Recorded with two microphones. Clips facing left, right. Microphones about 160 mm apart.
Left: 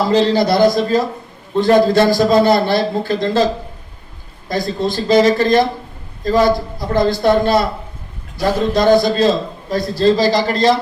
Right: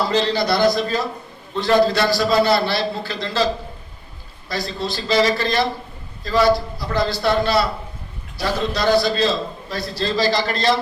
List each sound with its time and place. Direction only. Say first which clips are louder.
0.1 s a man's voice: left 6 dB; 45° left (ahead or behind)